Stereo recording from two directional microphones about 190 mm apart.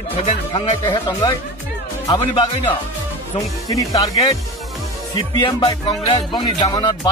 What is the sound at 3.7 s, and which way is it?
Speech, 15° left (ahead or behind).